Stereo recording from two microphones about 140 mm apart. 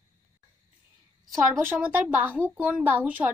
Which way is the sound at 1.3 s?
20° right (ahead or behind).